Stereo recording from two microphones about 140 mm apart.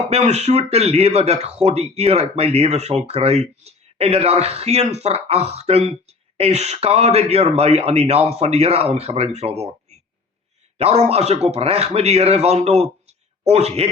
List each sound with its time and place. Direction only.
0.1 s speech: 50° right (ahead or behind)
10.8 s a man's voice: 45° right (ahead or behind)